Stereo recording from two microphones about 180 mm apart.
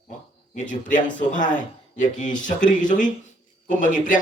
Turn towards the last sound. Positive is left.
turn(degrees=45)  # may be behind; listen again after turning